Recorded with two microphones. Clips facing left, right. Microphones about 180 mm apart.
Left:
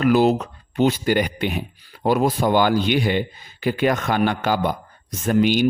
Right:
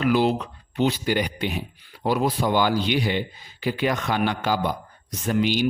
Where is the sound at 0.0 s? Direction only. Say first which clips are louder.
Left 4 dB; 45° left (ahead or behind).